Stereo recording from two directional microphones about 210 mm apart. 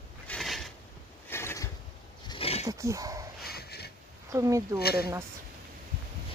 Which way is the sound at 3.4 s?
50° left (ahead or behind).